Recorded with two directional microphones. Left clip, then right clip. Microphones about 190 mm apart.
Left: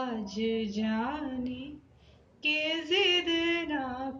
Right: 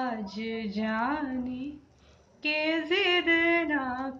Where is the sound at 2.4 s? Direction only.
10° right (ahead or behind).